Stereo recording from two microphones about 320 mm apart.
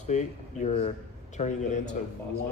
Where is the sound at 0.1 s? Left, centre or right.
Left.